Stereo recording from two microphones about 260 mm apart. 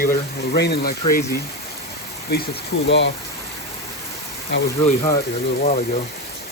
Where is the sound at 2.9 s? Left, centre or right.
Left.